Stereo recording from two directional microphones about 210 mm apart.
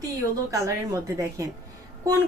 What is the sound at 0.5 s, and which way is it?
Speech, 15° right (ahead or behind).